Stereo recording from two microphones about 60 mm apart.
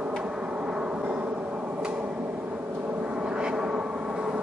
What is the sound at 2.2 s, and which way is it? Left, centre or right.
Vehicle, right.